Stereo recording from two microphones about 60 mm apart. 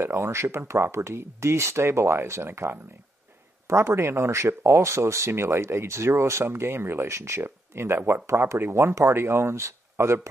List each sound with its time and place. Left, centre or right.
0.0 s speech: right